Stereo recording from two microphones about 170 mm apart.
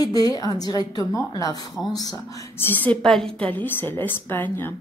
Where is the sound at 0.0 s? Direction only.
25° left (ahead or behind).